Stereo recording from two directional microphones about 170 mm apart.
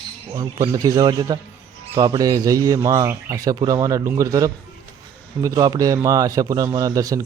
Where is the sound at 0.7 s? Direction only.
20° right (ahead or behind).